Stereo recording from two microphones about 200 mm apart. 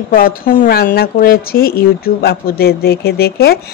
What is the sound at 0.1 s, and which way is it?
Speech, 45° left (ahead or behind).